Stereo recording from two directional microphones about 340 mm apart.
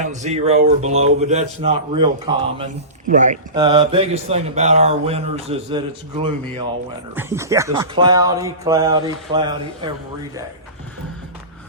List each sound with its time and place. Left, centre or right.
0.0 s speech: right